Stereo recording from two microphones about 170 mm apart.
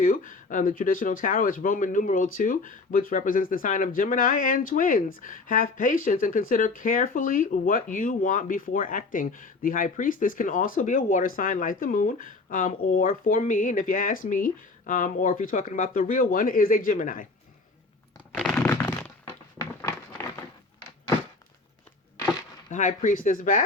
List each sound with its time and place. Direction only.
0.0 s speech: 50° left (ahead or behind)
18.5 s a sound: 15° left (ahead or behind)
22.7 s speech: 50° left (ahead or behind)